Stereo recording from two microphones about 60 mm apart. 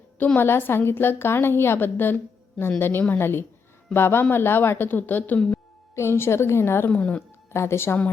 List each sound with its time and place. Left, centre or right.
0.3 s a woman's voice: left
5.9 s a woman's voice: left
6.9 s speech: left
7.5 s a woman's voice: left